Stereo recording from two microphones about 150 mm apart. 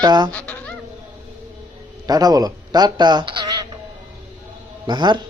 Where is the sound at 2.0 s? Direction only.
25° right (ahead or behind).